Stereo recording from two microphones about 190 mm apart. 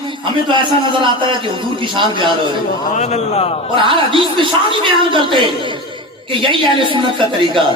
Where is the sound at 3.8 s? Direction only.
25° right (ahead or behind).